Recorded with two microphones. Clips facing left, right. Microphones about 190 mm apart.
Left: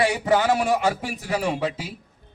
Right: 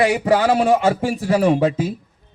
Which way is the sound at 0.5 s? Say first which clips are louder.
Right 6 dB; 30° right (ahead or behind).